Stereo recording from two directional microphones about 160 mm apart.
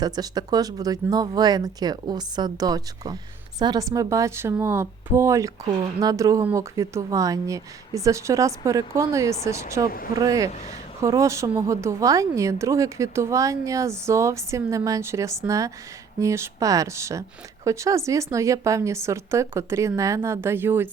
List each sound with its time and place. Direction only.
0.0 s speech: 25° right (ahead or behind)